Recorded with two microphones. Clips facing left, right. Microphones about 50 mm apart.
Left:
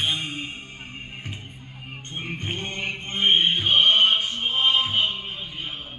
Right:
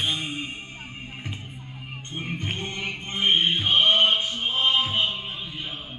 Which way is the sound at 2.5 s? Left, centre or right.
Left.